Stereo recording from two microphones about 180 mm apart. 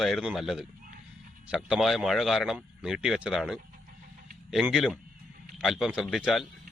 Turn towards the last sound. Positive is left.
turn(degrees=0)  # may be behind; listen again after turning